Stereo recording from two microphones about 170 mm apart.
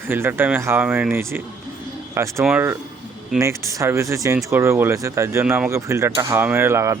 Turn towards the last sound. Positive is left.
turn(degrees=-15)  # may be behind; listen again after turning